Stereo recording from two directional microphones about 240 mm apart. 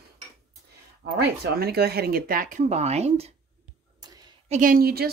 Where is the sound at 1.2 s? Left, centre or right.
Right.